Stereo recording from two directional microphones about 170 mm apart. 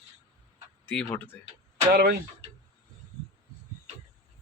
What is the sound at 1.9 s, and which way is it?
Speech, 70° right (ahead or behind).